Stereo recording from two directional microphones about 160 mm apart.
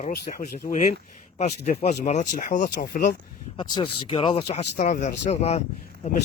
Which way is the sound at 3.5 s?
30° left (ahead or behind).